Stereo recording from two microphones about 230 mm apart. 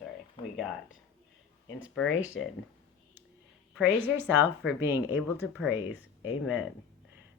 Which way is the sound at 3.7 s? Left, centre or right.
Centre.